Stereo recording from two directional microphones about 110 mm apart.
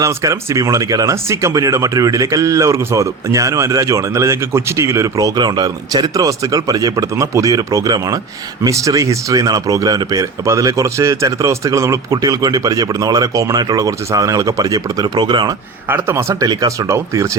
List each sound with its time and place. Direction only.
0.0 s speech: 30° right (ahead or behind)
15.9 s speech: 20° right (ahead or behind)